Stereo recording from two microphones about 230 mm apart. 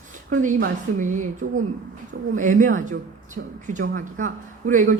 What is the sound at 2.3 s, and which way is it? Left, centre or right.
A woman's voice, right.